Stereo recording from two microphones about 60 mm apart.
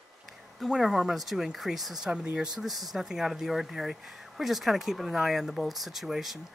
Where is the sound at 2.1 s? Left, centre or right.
Centre.